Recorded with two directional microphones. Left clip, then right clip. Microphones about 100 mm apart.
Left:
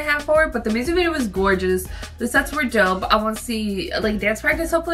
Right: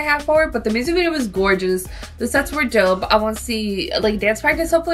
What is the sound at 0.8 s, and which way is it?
Speech, 20° right (ahead or behind).